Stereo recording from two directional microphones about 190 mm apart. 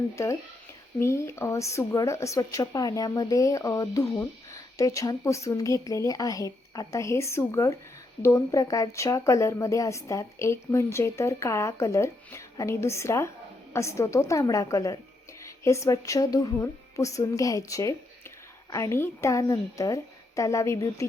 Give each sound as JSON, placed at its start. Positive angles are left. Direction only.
{"t": 0.9, "sound": "speech", "side_deg": 15}